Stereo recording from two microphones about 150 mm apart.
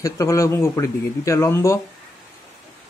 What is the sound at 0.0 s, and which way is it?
Speech, 20° left (ahead or behind).